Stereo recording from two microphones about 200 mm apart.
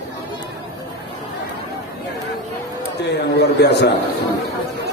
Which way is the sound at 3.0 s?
55° left (ahead or behind).